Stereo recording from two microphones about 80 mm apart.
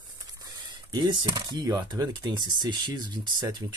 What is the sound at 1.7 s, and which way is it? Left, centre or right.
Speech, right.